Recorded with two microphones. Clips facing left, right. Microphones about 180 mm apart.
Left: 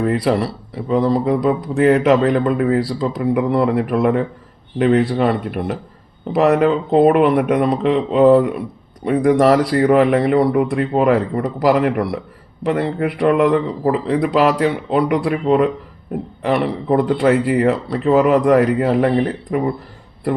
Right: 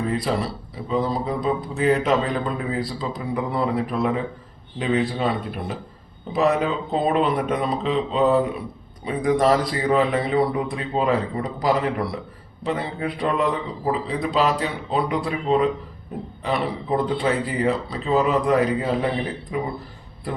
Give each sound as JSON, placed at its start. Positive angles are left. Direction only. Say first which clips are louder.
{"t": 0.0, "sound": "speech", "louder": "left 7 dB", "side_deg": 65}